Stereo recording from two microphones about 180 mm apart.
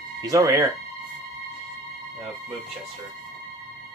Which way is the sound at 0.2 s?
20° right (ahead or behind).